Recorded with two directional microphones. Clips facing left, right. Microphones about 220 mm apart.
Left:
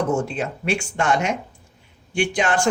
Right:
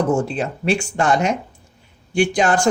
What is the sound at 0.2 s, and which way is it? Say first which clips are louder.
Speech: right 3 dB; 35° right (ahead or behind).